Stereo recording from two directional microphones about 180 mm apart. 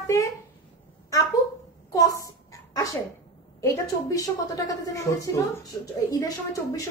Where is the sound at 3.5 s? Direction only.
20° left (ahead or behind).